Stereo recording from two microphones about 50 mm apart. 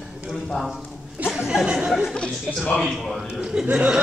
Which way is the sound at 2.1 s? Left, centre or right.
Centre.